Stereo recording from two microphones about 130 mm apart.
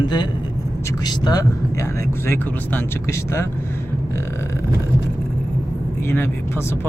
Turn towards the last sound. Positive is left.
turn(degrees=20)  # may be behind; listen again after turning